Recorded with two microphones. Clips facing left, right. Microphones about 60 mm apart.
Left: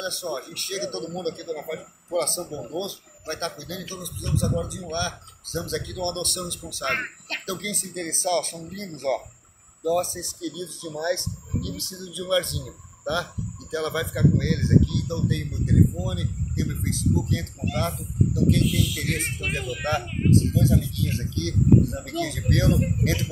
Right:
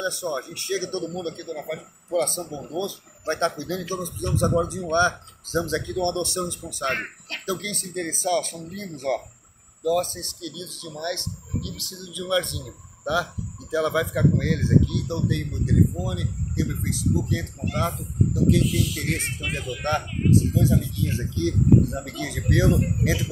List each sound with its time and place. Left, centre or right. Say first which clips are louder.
0.0 s speech: right 3 dB; centre
0.6 s speech: right 3 dB; right
1.1 s a man's voice: left 1 dB; centre
3.3 s speech: right 7 dB; right
6.6 s a man's voice: even; centre
9.8 s speech: right 1 dB; centre
11.7 s speech: left 2 dB; left
12.1 s a man's voice: even; centre
19.8 s a man's voice: right 2 dB; centre
20.5 s speech: even; centre
20.9 s speech: right 1 dB; right